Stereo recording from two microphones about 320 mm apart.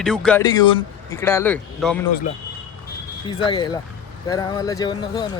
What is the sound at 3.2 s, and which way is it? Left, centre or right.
Speech, centre.